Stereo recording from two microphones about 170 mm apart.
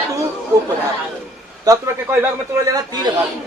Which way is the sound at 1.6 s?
15° right (ahead or behind).